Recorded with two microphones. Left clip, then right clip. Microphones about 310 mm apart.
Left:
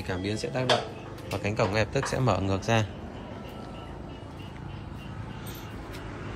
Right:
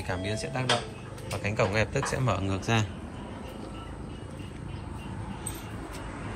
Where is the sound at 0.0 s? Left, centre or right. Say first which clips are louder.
Left 1 dB; centre.